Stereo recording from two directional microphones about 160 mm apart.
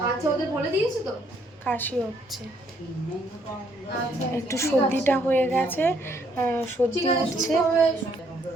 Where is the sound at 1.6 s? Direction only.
10° left (ahead or behind).